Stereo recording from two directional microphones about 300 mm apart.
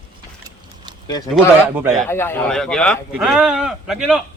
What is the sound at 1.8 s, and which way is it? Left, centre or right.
Speech, centre.